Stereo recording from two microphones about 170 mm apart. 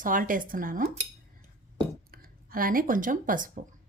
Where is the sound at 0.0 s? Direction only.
50° right (ahead or behind).